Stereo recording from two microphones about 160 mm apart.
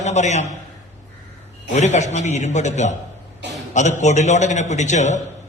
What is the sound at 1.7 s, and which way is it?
A man's voice, 45° left (ahead or behind).